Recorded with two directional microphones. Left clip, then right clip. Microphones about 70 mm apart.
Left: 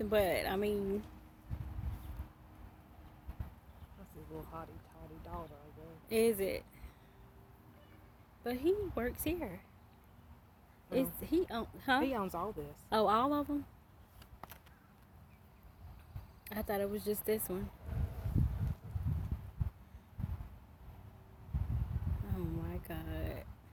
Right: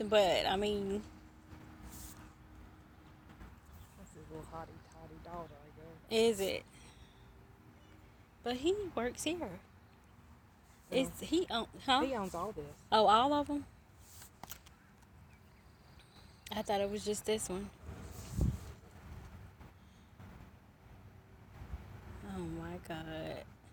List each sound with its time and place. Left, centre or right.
0.0 s a woman's voice: left
4.4 s speech: left
6.1 s speech: left
8.4 s a woman's voice: left
9.1 s speech: left
10.8 s a woman's voice: left
12.3 s speech: left
12.9 s a woman's voice: left
16.4 s speech: left
22.3 s a woman's voice: left